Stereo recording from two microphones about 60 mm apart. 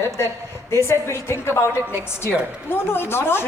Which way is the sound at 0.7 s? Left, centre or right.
Left.